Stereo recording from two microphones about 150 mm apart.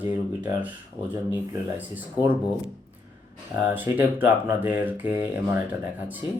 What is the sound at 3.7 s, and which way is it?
Speech, 15° right (ahead or behind).